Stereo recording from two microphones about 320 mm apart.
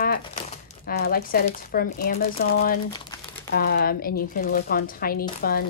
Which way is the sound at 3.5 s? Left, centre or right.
Left.